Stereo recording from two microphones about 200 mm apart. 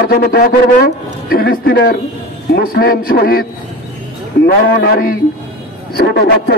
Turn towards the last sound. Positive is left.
turn(degrees=55)  # may be behind; listen again after turning